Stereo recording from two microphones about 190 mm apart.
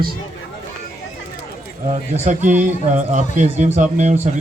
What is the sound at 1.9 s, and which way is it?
A man's voice, 35° right (ahead or behind).